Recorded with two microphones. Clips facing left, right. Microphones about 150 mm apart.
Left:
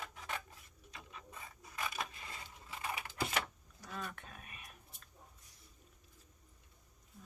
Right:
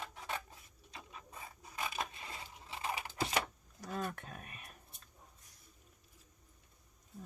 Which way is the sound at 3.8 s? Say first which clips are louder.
Right 6 dB; 45° right (ahead or behind).